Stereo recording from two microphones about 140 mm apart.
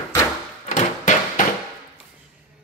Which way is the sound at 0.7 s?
65° left (ahead or behind).